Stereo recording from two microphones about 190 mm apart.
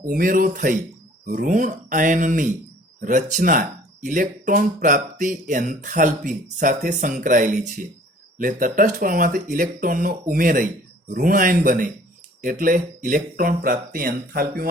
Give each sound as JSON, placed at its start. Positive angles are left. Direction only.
{"t": 0.0, "sound": "speech", "side_deg": -45}